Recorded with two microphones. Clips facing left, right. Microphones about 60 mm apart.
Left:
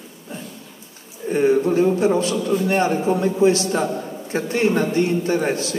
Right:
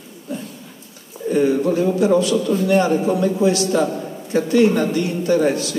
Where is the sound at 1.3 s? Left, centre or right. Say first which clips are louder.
Even; left.